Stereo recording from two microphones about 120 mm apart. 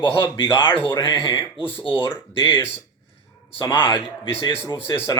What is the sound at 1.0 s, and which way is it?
Speech, 40° left (ahead or behind).